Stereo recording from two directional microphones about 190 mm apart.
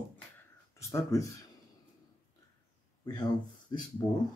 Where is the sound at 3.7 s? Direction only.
20° left (ahead or behind).